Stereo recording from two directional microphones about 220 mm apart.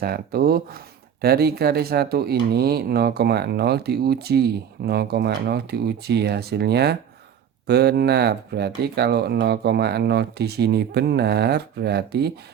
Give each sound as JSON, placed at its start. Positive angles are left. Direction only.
{"t": 0.0, "sound": "speech", "side_deg": -45}